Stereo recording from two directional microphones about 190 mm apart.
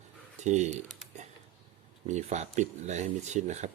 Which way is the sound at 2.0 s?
40° right (ahead or behind).